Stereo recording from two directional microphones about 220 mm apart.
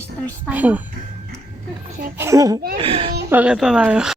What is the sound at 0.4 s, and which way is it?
Speech, 5° right (ahead or behind).